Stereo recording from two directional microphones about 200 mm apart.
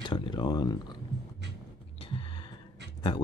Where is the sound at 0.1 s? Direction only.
25° left (ahead or behind).